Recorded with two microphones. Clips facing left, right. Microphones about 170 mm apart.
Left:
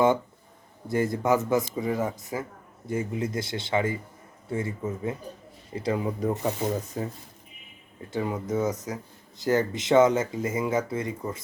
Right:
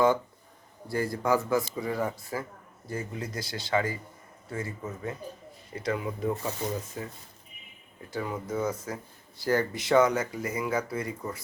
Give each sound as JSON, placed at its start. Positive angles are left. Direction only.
{"t": 0.9, "sound": "speech", "side_deg": 20}
{"t": 6.4, "sound": "speech", "side_deg": 20}
{"t": 7.0, "sound": "speech", "side_deg": 35}
{"t": 8.1, "sound": "speech", "side_deg": 20}